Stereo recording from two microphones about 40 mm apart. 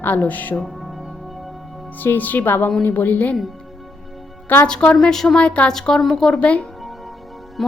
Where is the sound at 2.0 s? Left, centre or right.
Left.